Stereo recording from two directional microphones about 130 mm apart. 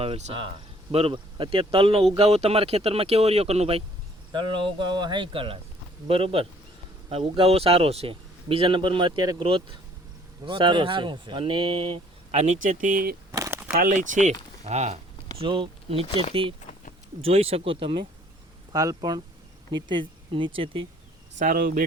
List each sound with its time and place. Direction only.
0.0 s speech: 50° right (ahead or behind)
4.3 s speech: 35° right (ahead or behind)
12.4 s speech: 75° right (ahead or behind)
13.3 s a sound: 25° right (ahead or behind)
13.8 s speech: 80° right
14.6 s speech: 55° right (ahead or behind)
15.4 s speech: 40° right (ahead or behind)
18.7 s speech: 30° right (ahead or behind)
21.3 s speech: 90° right